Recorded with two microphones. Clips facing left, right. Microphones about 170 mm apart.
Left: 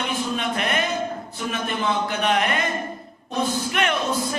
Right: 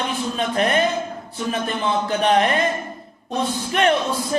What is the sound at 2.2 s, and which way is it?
Speech, 35° right (ahead or behind).